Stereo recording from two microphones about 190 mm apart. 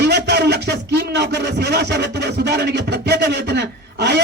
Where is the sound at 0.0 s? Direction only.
60° right (ahead or behind).